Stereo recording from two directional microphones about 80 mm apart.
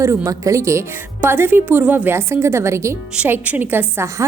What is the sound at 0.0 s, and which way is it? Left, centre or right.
Speech, right.